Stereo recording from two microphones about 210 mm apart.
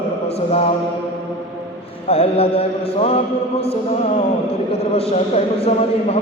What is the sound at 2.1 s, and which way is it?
Mantra, 30° left (ahead or behind).